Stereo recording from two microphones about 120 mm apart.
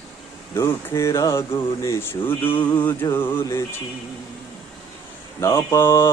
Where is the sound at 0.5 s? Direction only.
25° left (ahead or behind).